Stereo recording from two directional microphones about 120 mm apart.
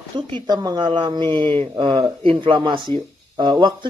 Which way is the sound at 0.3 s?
35° right (ahead or behind).